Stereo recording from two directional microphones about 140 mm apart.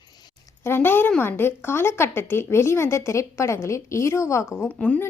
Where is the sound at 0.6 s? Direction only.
15° left (ahead or behind).